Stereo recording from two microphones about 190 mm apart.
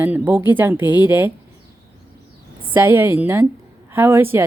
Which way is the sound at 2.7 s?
10° right (ahead or behind).